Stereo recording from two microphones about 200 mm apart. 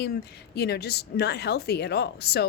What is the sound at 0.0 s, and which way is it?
A woman's voice, 55° left (ahead or behind).